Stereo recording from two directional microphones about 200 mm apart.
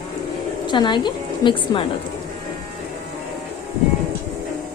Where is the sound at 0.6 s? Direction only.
20° left (ahead or behind).